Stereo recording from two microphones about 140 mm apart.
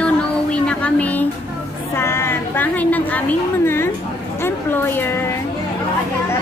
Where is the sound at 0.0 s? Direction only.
10° left (ahead or behind).